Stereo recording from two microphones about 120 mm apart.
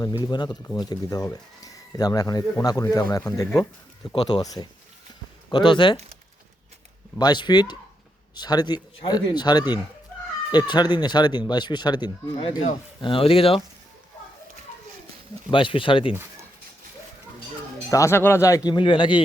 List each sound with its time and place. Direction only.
0.0 s speech: 35° left (ahead or behind)
4.1 s speech: 40° left (ahead or behind)
7.2 s speech: 35° left (ahead or behind)
13.0 s speech: 50° left (ahead or behind)
15.4 s speech: 45° left (ahead or behind)
17.9 s speech: 25° left (ahead or behind)
18.7 s speech: 45° left (ahead or behind)